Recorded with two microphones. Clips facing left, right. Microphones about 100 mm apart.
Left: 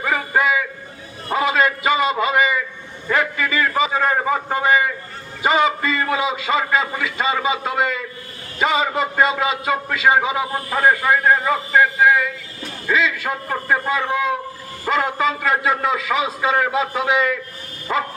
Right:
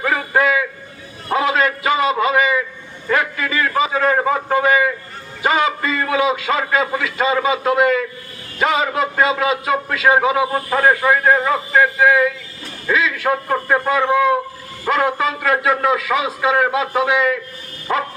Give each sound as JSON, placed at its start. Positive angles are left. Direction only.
{"t": 0.0, "sound": "music", "side_deg": 0}
{"t": 1.3, "sound": "a sound", "side_deg": 0}
{"t": 5.4, "sound": "a man's voice", "side_deg": 0}
{"t": 12.9, "sound": "a man's voice", "side_deg": -5}